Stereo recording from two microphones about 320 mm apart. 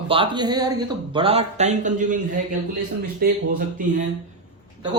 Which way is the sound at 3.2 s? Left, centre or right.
Right.